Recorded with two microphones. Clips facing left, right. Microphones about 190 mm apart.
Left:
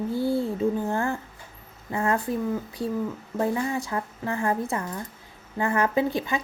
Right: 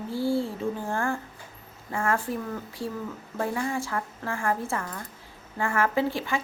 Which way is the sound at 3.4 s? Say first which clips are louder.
Left 3 dB; 20° left (ahead or behind).